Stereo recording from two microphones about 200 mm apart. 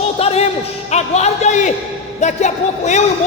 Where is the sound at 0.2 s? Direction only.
30° left (ahead or behind).